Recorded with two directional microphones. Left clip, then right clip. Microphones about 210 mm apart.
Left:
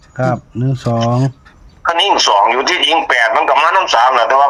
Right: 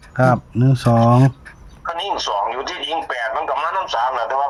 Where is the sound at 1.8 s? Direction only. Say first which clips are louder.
Left 11 dB; 45° left (ahead or behind).